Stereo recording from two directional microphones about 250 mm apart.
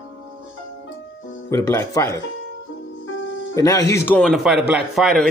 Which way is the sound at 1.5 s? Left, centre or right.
Centre.